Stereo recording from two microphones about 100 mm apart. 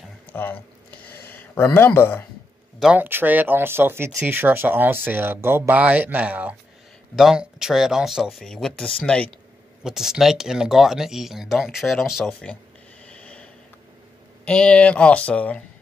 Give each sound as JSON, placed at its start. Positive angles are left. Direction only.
{"t": 0.3, "sound": "a sound", "side_deg": 20}
{"t": 3.0, "sound": "speech", "side_deg": -20}
{"t": 7.2, "sound": "speech", "side_deg": -5}
{"t": 9.8, "sound": "speech", "side_deg": -5}
{"t": 13.0, "sound": "snort", "side_deg": 10}
{"t": 14.4, "sound": "speech", "side_deg": 10}